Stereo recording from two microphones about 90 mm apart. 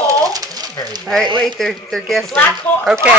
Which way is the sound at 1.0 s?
Centre (ahead or behind).